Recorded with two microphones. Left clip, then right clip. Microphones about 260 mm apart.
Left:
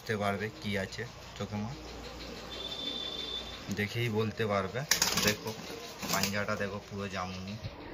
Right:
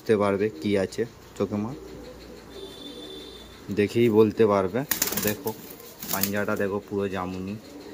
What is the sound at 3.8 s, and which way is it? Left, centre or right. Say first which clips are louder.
Speech: right 14 dB; right.